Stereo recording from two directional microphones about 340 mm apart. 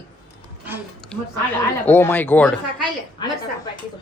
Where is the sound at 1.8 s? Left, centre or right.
Centre.